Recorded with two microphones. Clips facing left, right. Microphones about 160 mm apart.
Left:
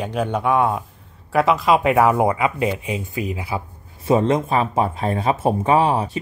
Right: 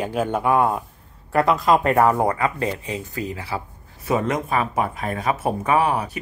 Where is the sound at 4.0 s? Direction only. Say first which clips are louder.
Left 5 dB; 30° left (ahead or behind).